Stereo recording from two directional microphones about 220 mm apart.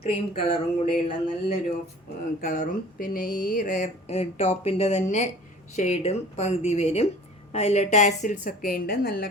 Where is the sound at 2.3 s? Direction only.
45° left (ahead or behind).